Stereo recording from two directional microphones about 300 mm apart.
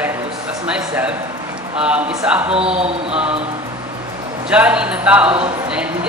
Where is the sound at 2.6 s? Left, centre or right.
Centre.